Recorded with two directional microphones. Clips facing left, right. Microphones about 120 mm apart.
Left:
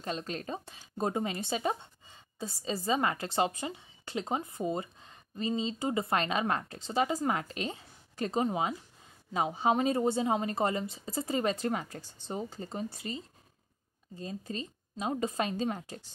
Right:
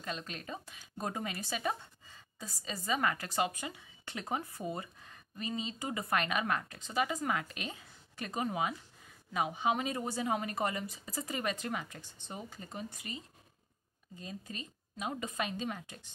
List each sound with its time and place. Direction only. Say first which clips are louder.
0.0 s a woman's voice: left 6 dB; 35° left (ahead or behind)